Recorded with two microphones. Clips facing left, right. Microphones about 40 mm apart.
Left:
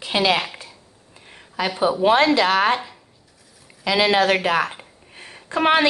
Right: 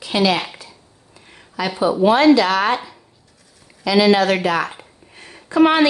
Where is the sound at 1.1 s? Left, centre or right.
Left.